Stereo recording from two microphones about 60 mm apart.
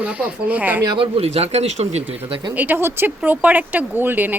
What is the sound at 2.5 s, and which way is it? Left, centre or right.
Speech, right.